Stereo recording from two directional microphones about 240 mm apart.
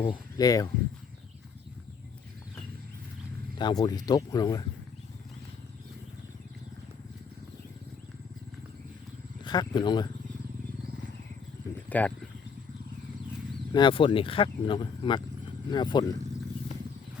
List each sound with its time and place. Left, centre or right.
0.0 s speech: centre
3.6 s speech: centre
9.4 s speech: centre
11.9 s speech: centre
13.7 s speech: left